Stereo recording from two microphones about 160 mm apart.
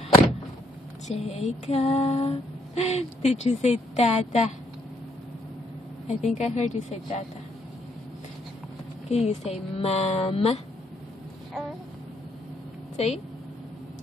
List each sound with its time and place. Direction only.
1.0 s female singing: 40° left (ahead or behind)
6.0 s a woman's voice: 45° left (ahead or behind)
9.1 s female singing: 40° left (ahead or behind)
12.9 s a woman's voice: 40° left (ahead or behind)